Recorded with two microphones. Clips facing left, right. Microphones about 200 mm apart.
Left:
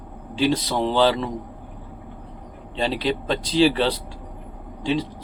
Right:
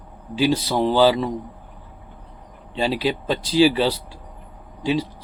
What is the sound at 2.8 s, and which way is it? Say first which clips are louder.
Speech: right 1 dB; 5° right (ahead or behind).